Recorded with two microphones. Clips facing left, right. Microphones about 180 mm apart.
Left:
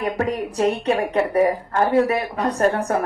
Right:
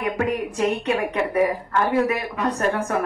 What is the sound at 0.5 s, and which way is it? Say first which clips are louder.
A woman's voice: left 2 dB; 35° left (ahead or behind).